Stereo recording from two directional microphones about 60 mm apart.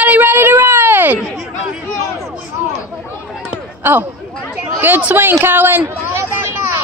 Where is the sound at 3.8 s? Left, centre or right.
Right.